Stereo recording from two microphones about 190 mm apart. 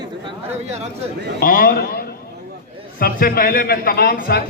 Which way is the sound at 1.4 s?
50° left (ahead or behind).